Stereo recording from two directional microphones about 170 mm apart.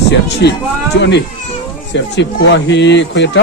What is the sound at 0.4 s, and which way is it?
Speech, 75° left (ahead or behind).